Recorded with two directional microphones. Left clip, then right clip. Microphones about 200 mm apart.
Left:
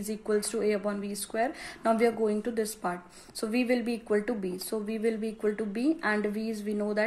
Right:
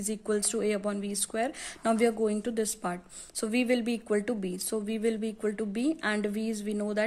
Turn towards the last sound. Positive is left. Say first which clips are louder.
# left 1 dB
turn(degrees=-30)  # may be behind; listen again after turning